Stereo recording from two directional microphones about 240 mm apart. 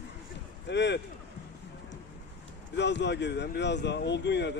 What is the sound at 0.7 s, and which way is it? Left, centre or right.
Speech, left.